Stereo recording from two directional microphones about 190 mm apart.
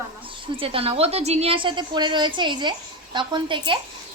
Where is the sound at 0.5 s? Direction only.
30° right (ahead or behind).